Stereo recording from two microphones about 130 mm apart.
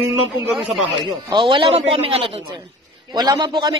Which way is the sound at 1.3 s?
40° right (ahead or behind).